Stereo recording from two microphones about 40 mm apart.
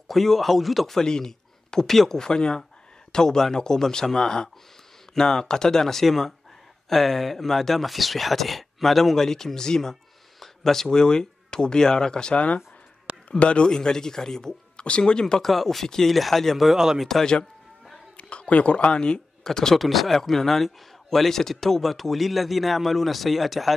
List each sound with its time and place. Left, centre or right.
0.1 s a man's voice: centre
0.9 s a man's voice: centre
13.7 s speech: centre
15.4 s a man's voice: centre
18.1 s speech: left
19.4 s speech: centre
19.8 s a man's voice: centre